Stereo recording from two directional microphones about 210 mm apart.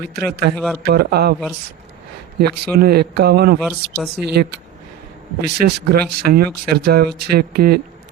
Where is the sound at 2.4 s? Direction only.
45° right (ahead or behind).